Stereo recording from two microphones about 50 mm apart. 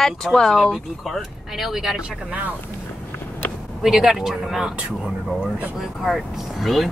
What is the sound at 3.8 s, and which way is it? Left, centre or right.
Speech, centre.